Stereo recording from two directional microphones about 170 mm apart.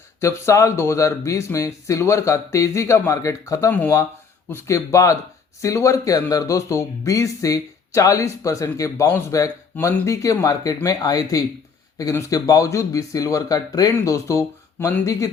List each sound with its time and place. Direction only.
0.2 s speech: 15° left (ahead or behind)